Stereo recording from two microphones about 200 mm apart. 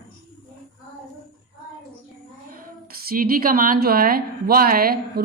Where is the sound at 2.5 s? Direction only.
45° right (ahead or behind).